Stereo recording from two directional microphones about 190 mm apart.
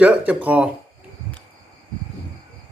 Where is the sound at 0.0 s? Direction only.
5° right (ahead or behind).